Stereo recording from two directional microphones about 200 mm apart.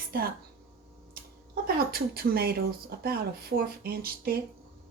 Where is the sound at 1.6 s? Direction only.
50° right (ahead or behind).